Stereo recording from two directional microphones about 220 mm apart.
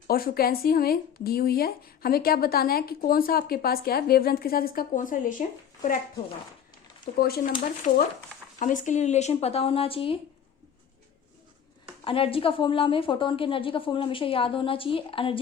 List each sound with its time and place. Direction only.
0.1 s speech: 45° left (ahead or behind)
7.0 s speech: 45° left (ahead or behind)
8.5 s a woman's voice: 35° left (ahead or behind)
12.0 s a woman's voice: 25° left (ahead or behind)